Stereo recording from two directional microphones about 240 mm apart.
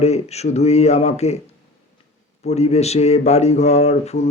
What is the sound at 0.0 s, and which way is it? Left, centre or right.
Speech, left.